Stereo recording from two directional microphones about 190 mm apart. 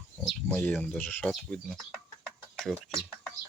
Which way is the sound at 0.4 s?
10° left (ahead or behind).